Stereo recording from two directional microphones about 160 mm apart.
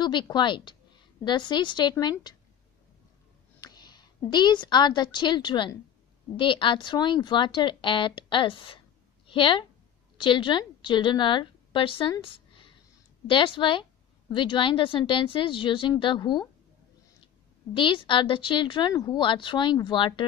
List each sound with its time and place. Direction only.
0.0 s a woman's voice: 30° left (ahead or behind)
3.6 s a woman's voice: 25° left (ahead or behind)
17.7 s a woman's voice: 30° left (ahead or behind)